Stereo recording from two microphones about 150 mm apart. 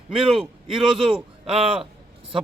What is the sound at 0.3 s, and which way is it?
A man's voice, 35° right (ahead or behind).